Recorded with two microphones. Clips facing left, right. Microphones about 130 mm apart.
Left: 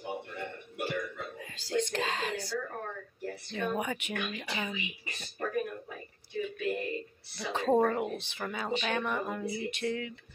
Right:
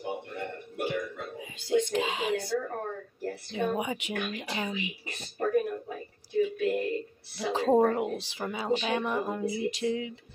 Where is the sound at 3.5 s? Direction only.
15° right (ahead or behind).